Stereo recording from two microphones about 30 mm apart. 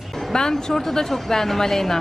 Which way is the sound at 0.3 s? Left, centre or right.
Centre.